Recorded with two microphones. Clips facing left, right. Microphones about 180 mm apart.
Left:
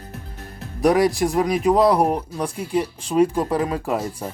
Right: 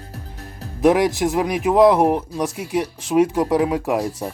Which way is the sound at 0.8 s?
5° right (ahead or behind).